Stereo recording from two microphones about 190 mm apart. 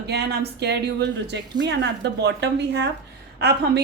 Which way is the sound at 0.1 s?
60° right (ahead or behind).